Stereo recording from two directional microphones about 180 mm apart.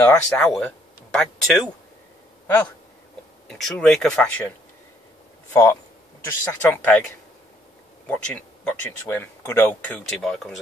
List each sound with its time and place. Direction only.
0.0 s speech: 5° left (ahead or behind)
3.4 s speech: centre (ahead or behind)
5.5 s speech: 15° left (ahead or behind)
8.1 s speech: 5° left (ahead or behind)